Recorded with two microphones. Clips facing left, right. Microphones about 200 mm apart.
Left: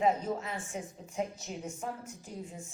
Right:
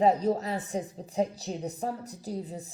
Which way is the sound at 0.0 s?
35° right (ahead or behind).